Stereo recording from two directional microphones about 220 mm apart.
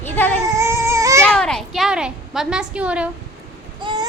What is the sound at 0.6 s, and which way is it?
Baby cry, 10° right (ahead or behind).